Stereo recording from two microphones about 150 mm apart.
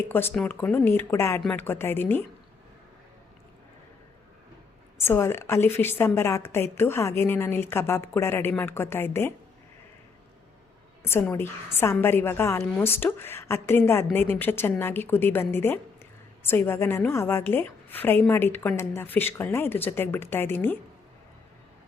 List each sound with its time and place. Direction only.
0.1 s a woman's voice: 15° left (ahead or behind)
4.9 s a woman's voice: 15° left (ahead or behind)
11.0 s a woman's voice: 15° left (ahead or behind)